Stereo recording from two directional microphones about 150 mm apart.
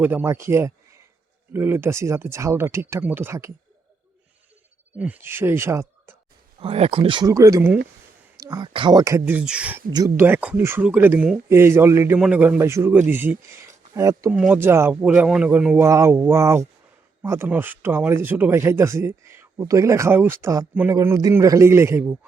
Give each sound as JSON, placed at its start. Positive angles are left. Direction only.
{"t": 0.0, "sound": "speech", "side_deg": -10}
{"t": 4.9, "sound": "speech", "side_deg": -10}
{"t": 6.6, "sound": "speech", "side_deg": -40}
{"t": 7.3, "sound": "speech", "side_deg": -20}
{"t": 14.3, "sound": "speech", "side_deg": -10}